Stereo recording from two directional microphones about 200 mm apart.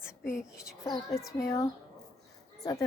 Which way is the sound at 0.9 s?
15° left (ahead or behind).